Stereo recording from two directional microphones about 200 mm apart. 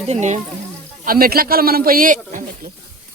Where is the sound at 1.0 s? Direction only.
45° right (ahead or behind).